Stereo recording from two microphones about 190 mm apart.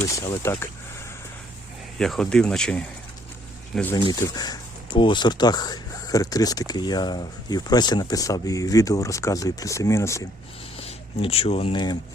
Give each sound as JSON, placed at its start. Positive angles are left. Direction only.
{"t": 0.2, "sound": "speech", "side_deg": 15}
{"t": 2.0, "sound": "speech", "side_deg": 5}
{"t": 3.9, "sound": "speech", "side_deg": 20}
{"t": 10.8, "sound": "speech", "side_deg": 30}